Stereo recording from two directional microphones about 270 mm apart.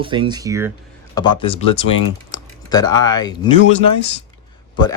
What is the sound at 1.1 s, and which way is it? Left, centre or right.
Speech, centre.